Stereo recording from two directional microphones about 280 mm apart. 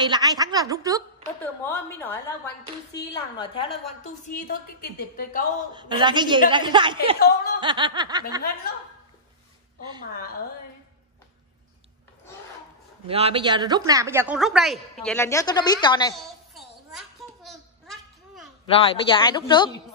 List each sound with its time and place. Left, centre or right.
0.0 s a woman's voice: centre
1.6 s a woman's voice: centre; by 5.5 s left
5.7 s a woman's voice: centre
7.2 s chuckle: left
7.6 s a woman's voice: centre
13.0 s a woman's voice: centre
16.2 s a sound: centre
18.8 s speech: centre